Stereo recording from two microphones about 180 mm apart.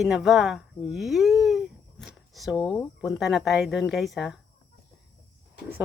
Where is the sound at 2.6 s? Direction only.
25° left (ahead or behind).